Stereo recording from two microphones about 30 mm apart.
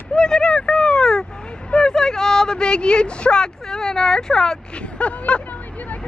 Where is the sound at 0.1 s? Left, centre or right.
Left.